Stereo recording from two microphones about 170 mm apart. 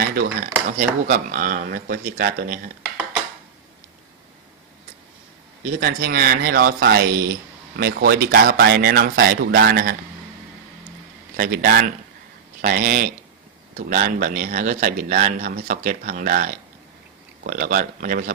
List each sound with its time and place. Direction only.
0.1 s speech: 50° right (ahead or behind)
5.8 s speech: 60° right (ahead or behind)
11.3 s speech: 55° right (ahead or behind)